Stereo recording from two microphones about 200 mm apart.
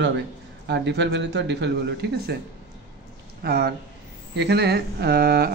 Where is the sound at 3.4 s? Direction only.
55° right (ahead or behind).